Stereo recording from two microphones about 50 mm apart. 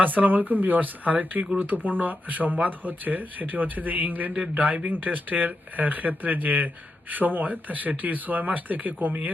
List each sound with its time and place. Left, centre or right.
0.0 s speech: right